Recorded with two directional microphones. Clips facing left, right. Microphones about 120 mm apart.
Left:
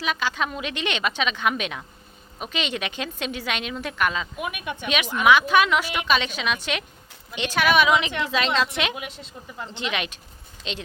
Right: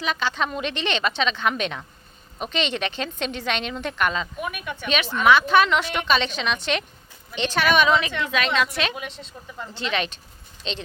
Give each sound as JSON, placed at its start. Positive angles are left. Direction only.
{"t": 0.0, "sound": "a woman's voice", "side_deg": 10}
{"t": 8.3, "sound": "a woman's voice", "side_deg": 30}